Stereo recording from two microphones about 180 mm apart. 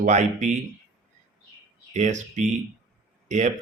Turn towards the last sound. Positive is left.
turn(degrees=-40)  # may be behind; listen again after turning